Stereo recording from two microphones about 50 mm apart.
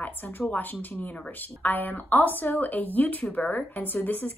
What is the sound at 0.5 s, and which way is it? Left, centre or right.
A woman's voice, left.